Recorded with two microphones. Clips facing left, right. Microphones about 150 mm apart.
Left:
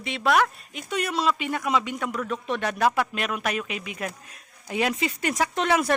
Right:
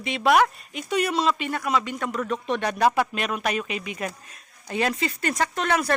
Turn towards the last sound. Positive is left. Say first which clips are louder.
# left 1 dB
turn(degrees=15)  # may be behind; listen again after turning